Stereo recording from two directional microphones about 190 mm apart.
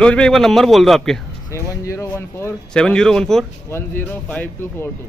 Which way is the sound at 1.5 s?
15° left (ahead or behind).